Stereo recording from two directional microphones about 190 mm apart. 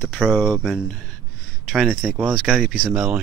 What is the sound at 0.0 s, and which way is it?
Speech, centre (ahead or behind).